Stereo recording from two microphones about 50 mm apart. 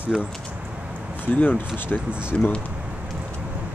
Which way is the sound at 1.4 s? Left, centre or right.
Left.